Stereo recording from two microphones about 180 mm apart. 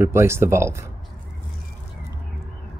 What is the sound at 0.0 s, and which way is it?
Speech, 15° right (ahead or behind).